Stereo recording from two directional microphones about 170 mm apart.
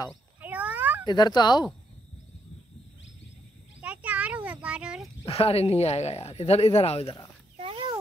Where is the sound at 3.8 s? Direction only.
10° right (ahead or behind).